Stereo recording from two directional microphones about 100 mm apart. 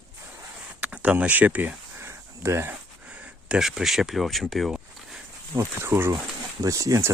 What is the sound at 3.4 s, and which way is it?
Speech, 5° right (ahead or behind).